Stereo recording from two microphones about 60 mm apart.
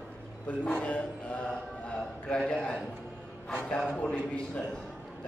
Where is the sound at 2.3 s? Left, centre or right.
Centre.